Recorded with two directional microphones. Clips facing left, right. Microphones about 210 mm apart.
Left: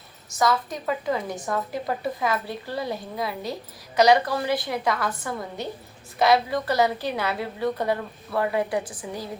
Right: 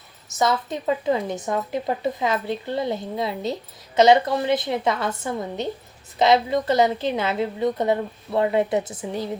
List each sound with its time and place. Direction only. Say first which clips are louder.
0.3 s a woman's voice: right 1 dB; 25° right (ahead or behind)